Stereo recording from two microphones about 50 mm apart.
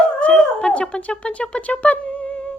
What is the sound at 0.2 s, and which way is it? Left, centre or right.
Speech, left.